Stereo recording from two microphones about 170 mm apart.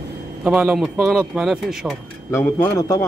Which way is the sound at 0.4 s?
5° right (ahead or behind).